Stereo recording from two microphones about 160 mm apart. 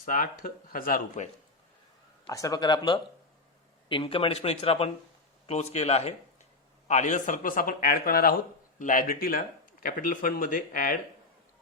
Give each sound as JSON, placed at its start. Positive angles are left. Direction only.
{"t": 0.0, "sound": "speech", "side_deg": 60}
{"t": 2.3, "sound": "speech", "side_deg": 20}